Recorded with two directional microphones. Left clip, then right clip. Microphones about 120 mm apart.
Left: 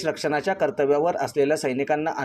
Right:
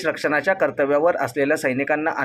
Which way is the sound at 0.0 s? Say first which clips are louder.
Right 4 dB; 40° left (ahead or behind).